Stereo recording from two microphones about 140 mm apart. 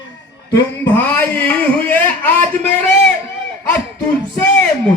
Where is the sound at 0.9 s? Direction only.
15° left (ahead or behind).